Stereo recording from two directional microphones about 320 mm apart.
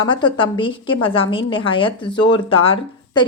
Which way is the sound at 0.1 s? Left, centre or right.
Centre.